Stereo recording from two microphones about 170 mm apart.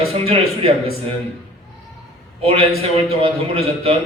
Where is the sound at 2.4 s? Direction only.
35° right (ahead or behind).